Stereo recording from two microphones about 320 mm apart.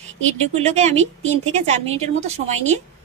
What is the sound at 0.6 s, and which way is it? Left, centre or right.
Speech, right.